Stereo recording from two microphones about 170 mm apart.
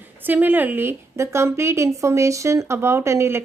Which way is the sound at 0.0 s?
10° right (ahead or behind).